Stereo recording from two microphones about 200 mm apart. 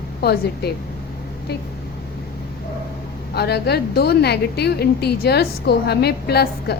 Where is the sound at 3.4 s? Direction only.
55° left (ahead or behind).